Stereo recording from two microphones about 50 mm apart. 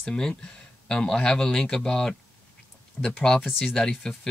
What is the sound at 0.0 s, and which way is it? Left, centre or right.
Speech, centre.